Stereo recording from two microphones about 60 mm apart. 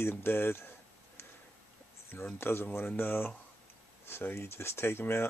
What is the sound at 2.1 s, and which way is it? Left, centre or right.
Speech, left.